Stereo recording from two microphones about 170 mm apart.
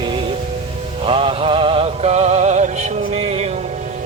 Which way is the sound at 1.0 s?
35° right (ahead or behind).